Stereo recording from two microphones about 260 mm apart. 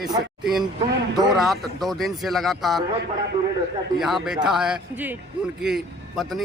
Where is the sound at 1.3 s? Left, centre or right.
Centre.